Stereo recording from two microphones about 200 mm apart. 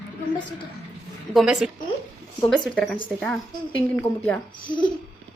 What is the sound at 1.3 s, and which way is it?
A woman's voice, centre (ahead or behind).